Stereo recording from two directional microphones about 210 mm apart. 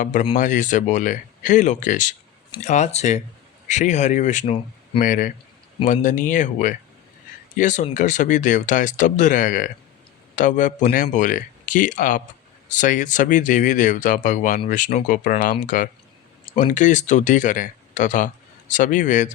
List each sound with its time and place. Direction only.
0.0 s speech: 40° left (ahead or behind)